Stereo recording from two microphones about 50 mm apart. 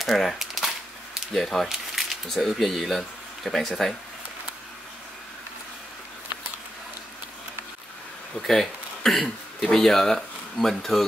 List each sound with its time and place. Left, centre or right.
0.0 s speech: centre
8.4 s speech: centre